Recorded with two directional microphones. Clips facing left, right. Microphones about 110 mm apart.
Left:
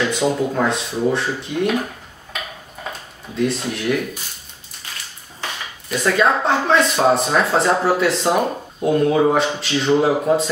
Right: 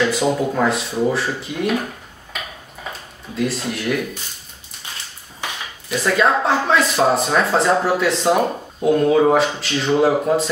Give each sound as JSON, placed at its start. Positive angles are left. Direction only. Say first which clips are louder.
{"t": 0.1, "sound": "speech", "louder": "even", "side_deg": -5}
{"t": 3.3, "sound": "speech", "louder": "left 1 dB", "side_deg": 0}
{"t": 5.4, "sound": "dishes", "louder": "even", "side_deg": -15}
{"t": 5.9, "sound": "speech", "louder": "even", "side_deg": 0}